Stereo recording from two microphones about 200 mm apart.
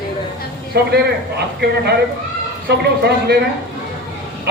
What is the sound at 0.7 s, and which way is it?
Speech, 55° right (ahead or behind).